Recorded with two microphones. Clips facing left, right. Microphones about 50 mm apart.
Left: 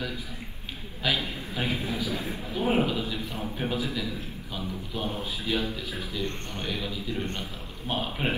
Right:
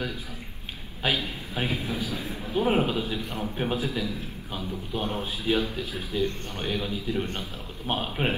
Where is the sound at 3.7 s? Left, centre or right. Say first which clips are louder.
Right 1 dB; right.